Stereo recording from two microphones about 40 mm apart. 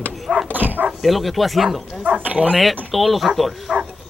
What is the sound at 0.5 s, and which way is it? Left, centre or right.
Speech, right.